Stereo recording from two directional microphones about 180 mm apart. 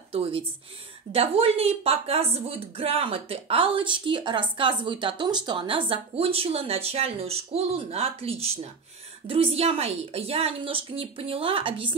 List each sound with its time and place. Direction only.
0.1 s speech: 30° right (ahead or behind)